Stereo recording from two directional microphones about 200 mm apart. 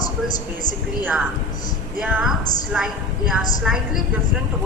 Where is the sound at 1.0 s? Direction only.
5° right (ahead or behind).